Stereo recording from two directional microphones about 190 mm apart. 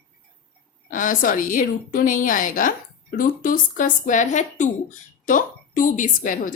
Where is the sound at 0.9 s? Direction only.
45° left (ahead or behind).